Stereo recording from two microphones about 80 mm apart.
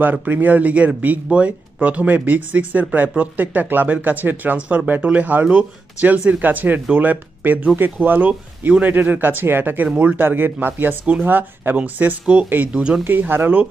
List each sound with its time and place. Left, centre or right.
0.0 s speech: right
13.1 s speech: right